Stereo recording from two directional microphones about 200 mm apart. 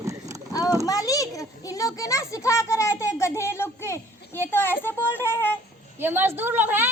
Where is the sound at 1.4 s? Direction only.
15° left (ahead or behind).